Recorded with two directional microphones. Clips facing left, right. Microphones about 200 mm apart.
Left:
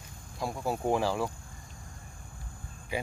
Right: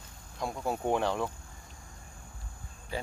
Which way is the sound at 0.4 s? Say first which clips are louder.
Left 1 dB; centre (ahead or behind).